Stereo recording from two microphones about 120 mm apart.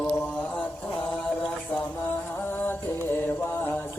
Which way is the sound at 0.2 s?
10° left (ahead or behind).